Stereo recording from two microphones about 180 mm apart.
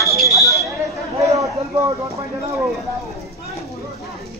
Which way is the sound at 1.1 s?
15° right (ahead or behind).